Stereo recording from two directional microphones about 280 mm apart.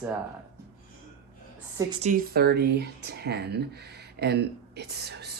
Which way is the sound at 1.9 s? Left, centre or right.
Right.